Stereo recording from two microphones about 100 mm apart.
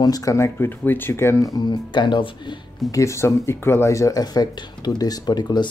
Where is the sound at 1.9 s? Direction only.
50° left (ahead or behind).